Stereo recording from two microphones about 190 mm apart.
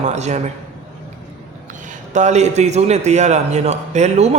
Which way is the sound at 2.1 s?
35° right (ahead or behind).